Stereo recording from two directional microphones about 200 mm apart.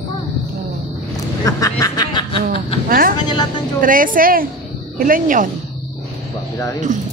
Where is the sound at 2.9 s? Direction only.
45° right (ahead or behind).